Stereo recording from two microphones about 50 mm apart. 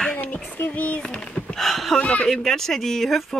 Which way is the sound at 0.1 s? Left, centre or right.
Left.